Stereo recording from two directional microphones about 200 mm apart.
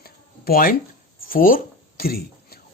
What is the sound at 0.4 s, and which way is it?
Speech, 45° left (ahead or behind).